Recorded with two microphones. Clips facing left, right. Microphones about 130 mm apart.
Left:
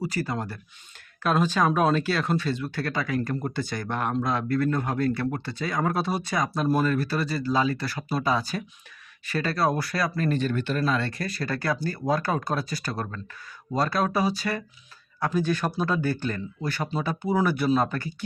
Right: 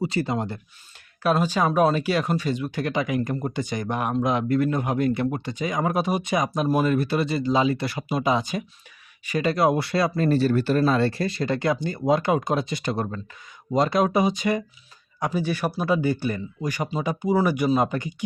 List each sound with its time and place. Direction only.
0.0 s speech: 25° right (ahead or behind)
1.2 s speech: 10° right (ahead or behind)